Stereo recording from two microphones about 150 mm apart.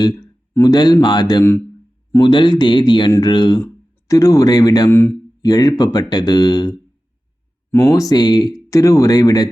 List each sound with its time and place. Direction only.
0.0 s speech: 25° left (ahead or behind)